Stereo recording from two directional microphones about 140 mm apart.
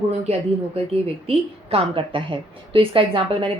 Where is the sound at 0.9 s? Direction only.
45° right (ahead or behind).